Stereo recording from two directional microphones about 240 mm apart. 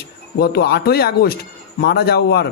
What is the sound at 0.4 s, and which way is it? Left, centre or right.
Speech, left.